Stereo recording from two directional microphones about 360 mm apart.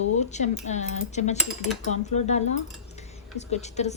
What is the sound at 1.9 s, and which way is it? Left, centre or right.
Speech, centre.